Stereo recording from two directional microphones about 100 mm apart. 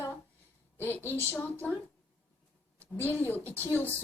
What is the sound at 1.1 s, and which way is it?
Speech, 20° left (ahead or behind).